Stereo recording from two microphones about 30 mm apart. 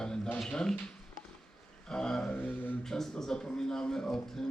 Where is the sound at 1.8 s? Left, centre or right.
Left.